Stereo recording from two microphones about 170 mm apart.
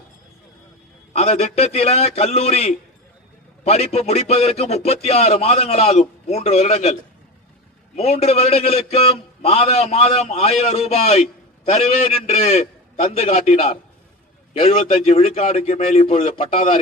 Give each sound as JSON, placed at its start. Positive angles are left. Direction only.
{"t": 1.1, "sound": "a man's voice", "side_deg": 40}
{"t": 7.9, "sound": "a man's voice", "side_deg": 40}